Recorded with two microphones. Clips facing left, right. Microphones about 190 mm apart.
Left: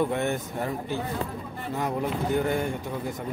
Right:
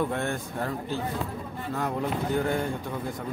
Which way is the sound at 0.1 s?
15° left (ahead or behind).